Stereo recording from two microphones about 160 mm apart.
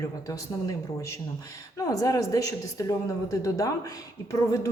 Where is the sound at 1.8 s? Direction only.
20° left (ahead or behind).